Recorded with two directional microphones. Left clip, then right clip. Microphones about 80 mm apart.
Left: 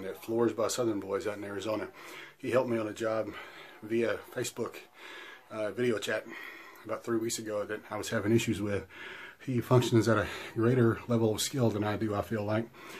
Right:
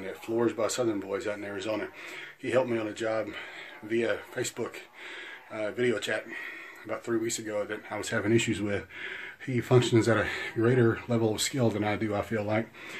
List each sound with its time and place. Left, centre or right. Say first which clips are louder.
0.0 s speech: right 1 dB; left
7.4 s speech: right 2 dB; left